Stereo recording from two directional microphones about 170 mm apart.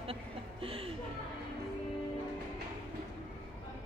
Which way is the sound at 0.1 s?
35° right (ahead or behind).